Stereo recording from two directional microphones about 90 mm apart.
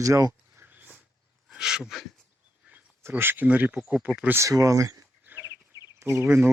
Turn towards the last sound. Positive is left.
turn(degrees=-25)  # may be behind; listen again after turning